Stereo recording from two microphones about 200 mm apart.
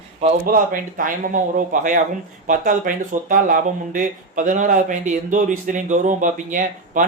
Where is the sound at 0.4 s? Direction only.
45° right (ahead or behind).